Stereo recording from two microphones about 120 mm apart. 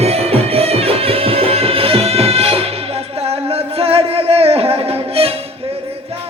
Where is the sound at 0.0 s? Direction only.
60° right (ahead or behind).